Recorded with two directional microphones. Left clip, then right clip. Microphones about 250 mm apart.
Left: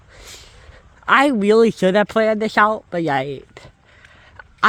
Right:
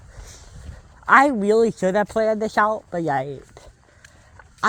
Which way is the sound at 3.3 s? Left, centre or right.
Left.